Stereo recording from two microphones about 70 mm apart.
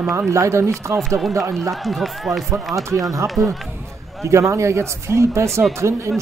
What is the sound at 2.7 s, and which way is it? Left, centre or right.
Speech, right.